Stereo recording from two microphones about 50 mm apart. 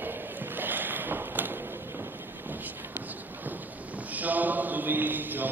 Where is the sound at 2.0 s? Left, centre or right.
Right.